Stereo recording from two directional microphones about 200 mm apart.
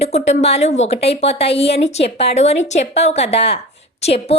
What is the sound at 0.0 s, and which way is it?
A woman's voice, 30° left (ahead or behind).